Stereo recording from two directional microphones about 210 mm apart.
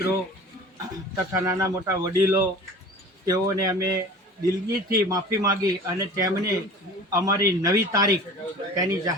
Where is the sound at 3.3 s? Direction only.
15° right (ahead or behind).